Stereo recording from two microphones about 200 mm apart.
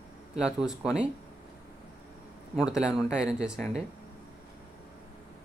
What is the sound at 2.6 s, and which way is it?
Speech, 5° right (ahead or behind).